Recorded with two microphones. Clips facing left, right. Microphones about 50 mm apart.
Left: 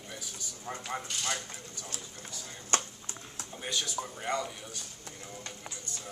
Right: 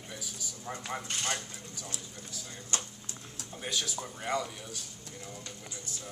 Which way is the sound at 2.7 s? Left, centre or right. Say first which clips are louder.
Left 7 dB; left.